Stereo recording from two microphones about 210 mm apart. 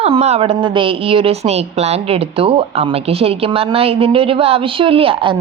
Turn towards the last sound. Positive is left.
turn(degrees=-25)  # may be behind; listen again after turning